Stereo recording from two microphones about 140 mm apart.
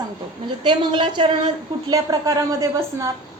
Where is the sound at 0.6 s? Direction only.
35° right (ahead or behind).